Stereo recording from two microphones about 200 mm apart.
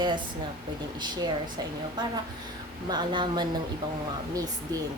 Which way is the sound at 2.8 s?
20° right (ahead or behind).